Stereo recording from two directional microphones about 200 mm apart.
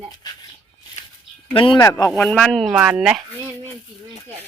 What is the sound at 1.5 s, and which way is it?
Speech, 25° left (ahead or behind).